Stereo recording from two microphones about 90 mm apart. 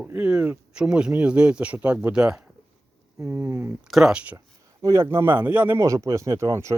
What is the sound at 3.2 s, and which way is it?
Speech, 20° right (ahead or behind).